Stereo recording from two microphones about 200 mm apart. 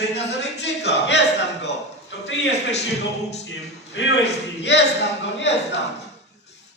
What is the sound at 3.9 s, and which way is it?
A man's voice, 60° left (ahead or behind).